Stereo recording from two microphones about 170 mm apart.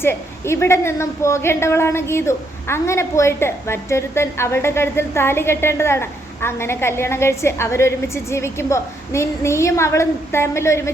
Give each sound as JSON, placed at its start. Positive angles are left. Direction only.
{"t": 0.0, "sound": "a woman's voice", "side_deg": 15}